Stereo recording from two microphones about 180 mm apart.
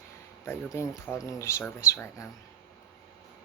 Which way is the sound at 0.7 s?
15° left (ahead or behind).